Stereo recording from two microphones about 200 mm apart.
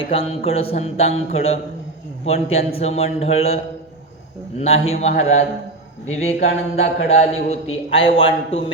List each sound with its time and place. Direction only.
0.0 s speech: 30° left (ahead or behind)